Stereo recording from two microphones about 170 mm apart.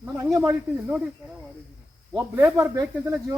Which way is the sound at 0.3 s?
5° right (ahead or behind).